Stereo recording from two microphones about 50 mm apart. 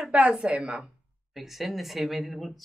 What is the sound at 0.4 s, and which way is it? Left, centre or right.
Speech, right.